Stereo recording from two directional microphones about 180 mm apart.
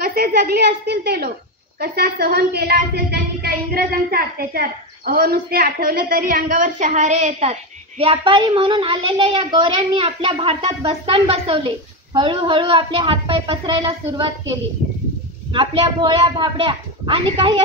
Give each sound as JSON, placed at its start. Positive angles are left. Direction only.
{"t": 0.1, "sound": "a woman's voice", "side_deg": -60}
{"t": 15.5, "sound": "a woman's voice", "side_deg": -25}